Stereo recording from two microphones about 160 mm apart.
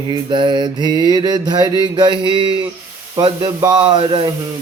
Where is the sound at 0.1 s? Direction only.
30° right (ahead or behind).